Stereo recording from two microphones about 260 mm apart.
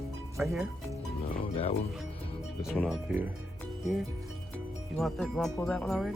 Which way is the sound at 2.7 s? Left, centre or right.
Centre.